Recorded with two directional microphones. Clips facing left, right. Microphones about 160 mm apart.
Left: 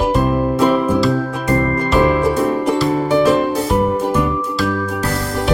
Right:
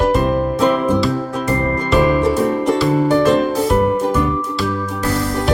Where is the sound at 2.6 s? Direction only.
5° left (ahead or behind).